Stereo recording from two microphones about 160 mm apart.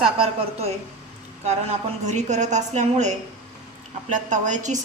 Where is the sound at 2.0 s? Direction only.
45° right (ahead or behind).